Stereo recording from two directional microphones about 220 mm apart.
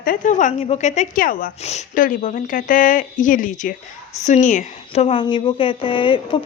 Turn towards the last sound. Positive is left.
turn(degrees=25)  # may be behind; listen again after turning